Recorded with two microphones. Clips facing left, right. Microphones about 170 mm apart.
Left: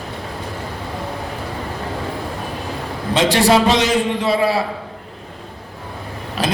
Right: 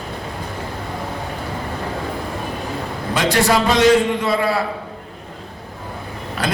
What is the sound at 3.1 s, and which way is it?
A man's voice, 25° left (ahead or behind).